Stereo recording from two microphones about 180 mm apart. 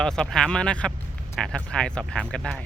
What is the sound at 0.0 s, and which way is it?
Speech, 5° left (ahead or behind).